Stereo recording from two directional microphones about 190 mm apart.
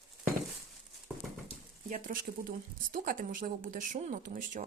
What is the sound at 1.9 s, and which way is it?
Speech, 45° right (ahead or behind).